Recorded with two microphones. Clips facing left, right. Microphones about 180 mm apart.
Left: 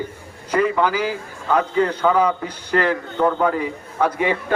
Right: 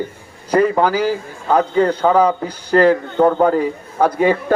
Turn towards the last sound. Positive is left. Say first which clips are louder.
# right 6 dB
turn(degrees=-35)  # may be behind; listen again after turning